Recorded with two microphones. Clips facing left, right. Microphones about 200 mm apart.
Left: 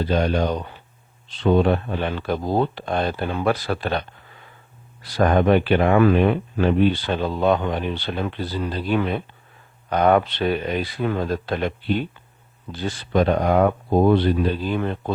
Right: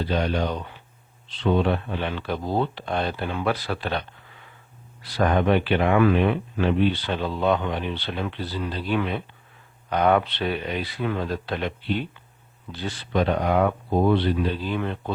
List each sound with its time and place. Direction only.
0.0 s speech: 45° left (ahead or behind)
5.0 s speech: 45° left (ahead or behind)